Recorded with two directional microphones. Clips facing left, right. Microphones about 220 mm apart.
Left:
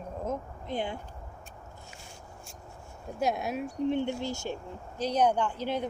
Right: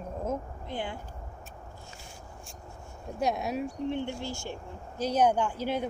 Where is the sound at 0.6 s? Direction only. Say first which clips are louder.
Left 3 dB; 15° left (ahead or behind).